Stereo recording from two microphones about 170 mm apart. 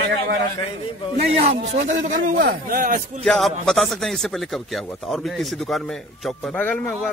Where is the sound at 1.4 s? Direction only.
45° right (ahead or behind).